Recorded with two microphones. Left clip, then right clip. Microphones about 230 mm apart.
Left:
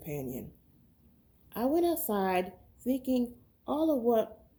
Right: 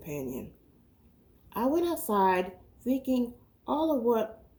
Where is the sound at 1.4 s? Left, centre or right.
Left.